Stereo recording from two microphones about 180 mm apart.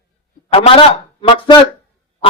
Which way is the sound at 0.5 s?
30° left (ahead or behind).